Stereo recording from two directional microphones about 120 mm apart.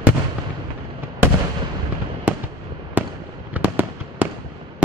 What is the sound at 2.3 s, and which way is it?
Fireworks, 10° right (ahead or behind).